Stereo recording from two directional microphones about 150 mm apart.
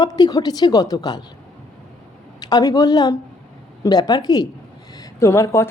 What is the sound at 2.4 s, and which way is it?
A woman's voice, 25° left (ahead or behind).